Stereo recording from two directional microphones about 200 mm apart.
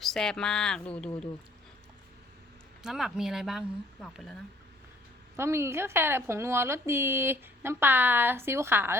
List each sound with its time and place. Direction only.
0.0 s speech: centre (ahead or behind)
2.8 s speech: centre (ahead or behind)
5.4 s speech: 15° right (ahead or behind)